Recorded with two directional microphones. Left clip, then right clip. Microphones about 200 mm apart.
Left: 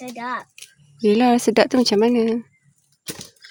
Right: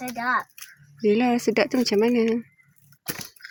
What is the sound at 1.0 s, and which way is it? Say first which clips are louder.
A woman's voice: left 5 dB; 15° left (ahead or behind).